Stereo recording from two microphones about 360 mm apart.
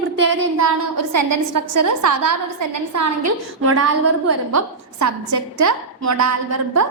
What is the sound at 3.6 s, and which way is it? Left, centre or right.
Speech, right.